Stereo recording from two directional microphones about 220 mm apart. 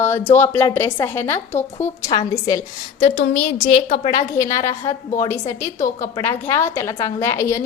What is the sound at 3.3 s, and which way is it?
Speech, 30° left (ahead or behind).